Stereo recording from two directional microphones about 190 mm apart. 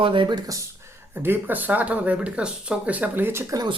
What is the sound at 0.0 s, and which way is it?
Speech, 25° right (ahead or behind).